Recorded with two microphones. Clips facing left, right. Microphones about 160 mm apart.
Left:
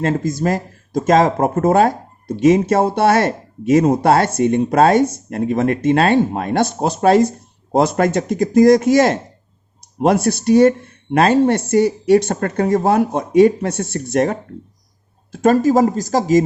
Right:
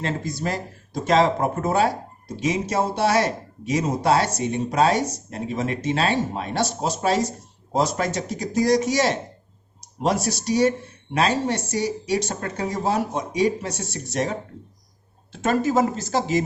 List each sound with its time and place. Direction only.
0.0 s speech: 45° left (ahead or behind)
15.3 s speech: 40° left (ahead or behind)